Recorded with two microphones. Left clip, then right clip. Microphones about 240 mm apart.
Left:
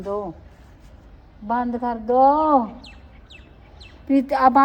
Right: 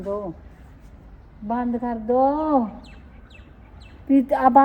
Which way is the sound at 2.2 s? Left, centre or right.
Left.